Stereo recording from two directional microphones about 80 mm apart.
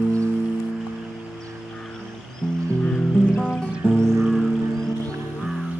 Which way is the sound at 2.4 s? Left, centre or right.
Centre.